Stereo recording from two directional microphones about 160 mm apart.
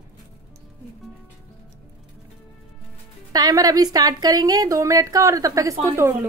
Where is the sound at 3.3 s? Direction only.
25° right (ahead or behind).